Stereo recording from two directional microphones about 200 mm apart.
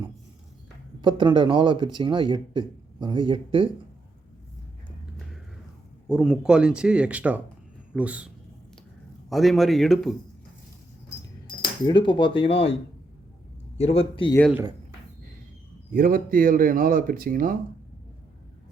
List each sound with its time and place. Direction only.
1.0 s speech: 25° right (ahead or behind)
6.1 s speech: 5° right (ahead or behind)
9.3 s speech: centre (ahead or behind)
11.4 s speech: 20° left (ahead or behind)
15.9 s speech: 45° right (ahead or behind)